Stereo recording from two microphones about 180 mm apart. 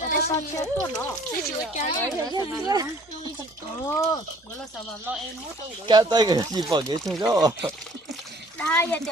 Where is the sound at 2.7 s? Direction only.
20° right (ahead or behind).